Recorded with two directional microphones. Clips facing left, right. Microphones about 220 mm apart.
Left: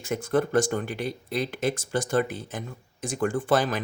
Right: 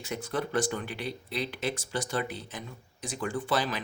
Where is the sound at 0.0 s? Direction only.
50° left (ahead or behind).